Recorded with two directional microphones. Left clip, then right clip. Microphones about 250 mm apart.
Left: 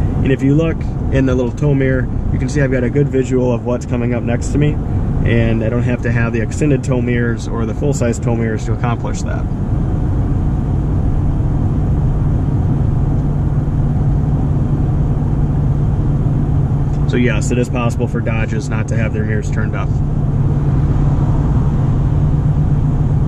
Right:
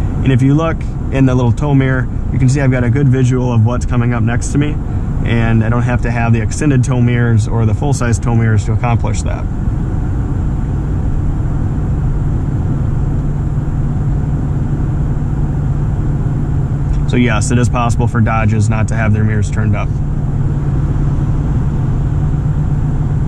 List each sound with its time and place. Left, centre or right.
0.2 s speech: centre
0.7 s speech: right
5.6 s speech: right
8.4 s speech: right
17.1 s speech: right